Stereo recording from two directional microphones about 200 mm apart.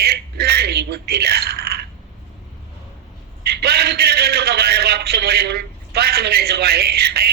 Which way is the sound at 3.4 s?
55° right (ahead or behind).